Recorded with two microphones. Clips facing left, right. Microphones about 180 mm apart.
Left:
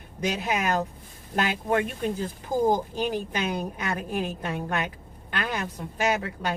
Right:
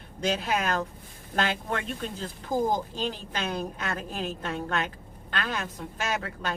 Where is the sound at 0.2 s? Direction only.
15° left (ahead or behind).